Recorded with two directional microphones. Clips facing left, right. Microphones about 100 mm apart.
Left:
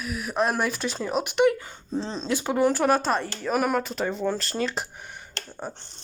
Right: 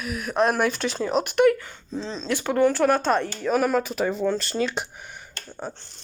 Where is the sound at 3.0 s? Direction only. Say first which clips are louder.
Right 3 dB; 5° left (ahead or behind).